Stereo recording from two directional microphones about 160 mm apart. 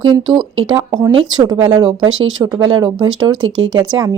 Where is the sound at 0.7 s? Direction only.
25° right (ahead or behind).